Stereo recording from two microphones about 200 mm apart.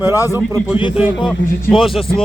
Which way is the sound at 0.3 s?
10° right (ahead or behind).